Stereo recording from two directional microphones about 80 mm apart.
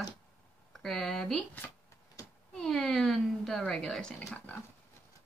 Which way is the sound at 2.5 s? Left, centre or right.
Centre.